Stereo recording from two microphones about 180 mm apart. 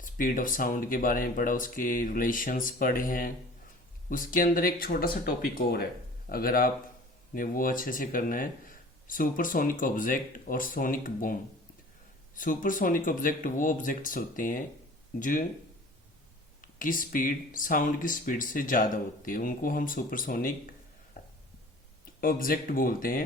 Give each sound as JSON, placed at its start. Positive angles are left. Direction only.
{"t": 0.0, "sound": "speech", "side_deg": 50}
{"t": 16.6, "sound": "speech", "side_deg": 50}
{"t": 21.2, "sound": "a sound", "side_deg": 55}
{"t": 22.2, "sound": "speech", "side_deg": 50}